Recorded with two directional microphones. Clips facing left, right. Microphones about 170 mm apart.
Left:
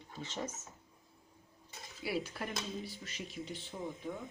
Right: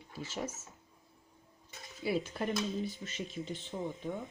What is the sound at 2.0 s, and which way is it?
Speech, 25° right (ahead or behind).